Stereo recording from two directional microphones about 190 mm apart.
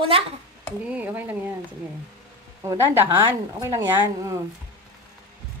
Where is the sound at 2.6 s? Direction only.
10° right (ahead or behind).